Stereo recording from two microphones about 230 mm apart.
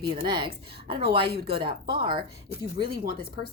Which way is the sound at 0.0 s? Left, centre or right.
Right.